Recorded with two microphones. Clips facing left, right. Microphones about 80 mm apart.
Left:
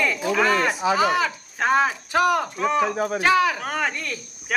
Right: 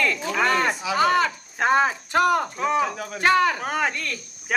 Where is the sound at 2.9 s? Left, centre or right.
Left.